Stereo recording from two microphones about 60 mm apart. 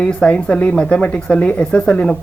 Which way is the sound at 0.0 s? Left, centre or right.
Centre.